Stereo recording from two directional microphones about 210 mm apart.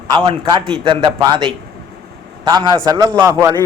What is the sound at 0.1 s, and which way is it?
A man's voice, 20° right (ahead or behind).